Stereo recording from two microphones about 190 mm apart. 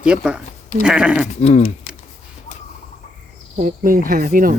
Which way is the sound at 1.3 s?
35° left (ahead or behind).